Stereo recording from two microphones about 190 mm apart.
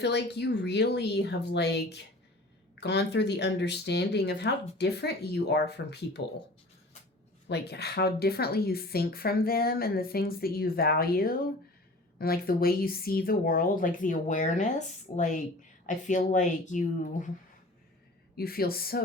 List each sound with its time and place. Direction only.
0.0 s speech: 65° left (ahead or behind)
7.4 s a woman's voice: 60° left (ahead or behind); by 17.2 s 40° left (ahead or behind)
18.3 s a woman's voice: 55° left (ahead or behind)